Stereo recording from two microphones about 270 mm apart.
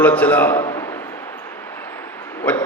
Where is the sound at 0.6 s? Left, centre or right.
Centre.